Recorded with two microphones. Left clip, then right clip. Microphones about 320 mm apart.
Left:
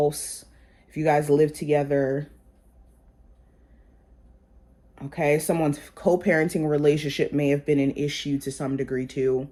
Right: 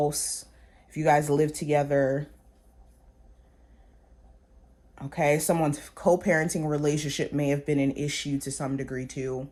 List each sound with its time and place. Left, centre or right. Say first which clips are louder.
0.0 s speech: left 3 dB; right
4.9 s speech: left 2 dB; right